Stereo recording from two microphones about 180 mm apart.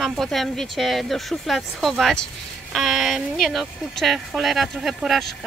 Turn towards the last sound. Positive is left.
turn(degrees=0)  # may be behind; listen again after turning